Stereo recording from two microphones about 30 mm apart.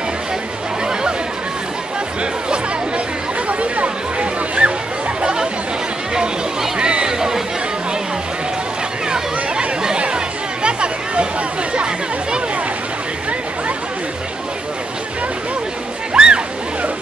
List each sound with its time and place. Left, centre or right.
3.4 s a sound: right
5.2 s chatter: right
6.8 s music: right
7.2 s chatter: centre
9.1 s a sound: right
9.9 s chatter: right
16.1 s music: right